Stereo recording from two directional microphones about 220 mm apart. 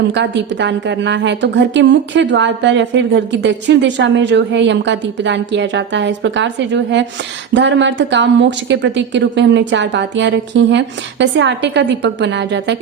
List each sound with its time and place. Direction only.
0.1 s a woman's voice: 55° right (ahead or behind)